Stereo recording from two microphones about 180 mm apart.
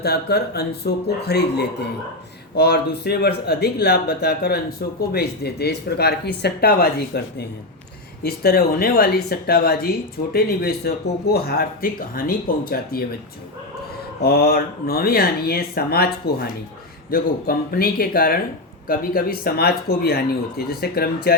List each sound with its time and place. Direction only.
0.0 s speech: 65° left (ahead or behind)
14.2 s speech: 60° left (ahead or behind)